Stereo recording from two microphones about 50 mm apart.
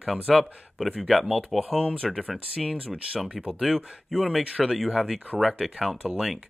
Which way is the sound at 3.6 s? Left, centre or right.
Centre.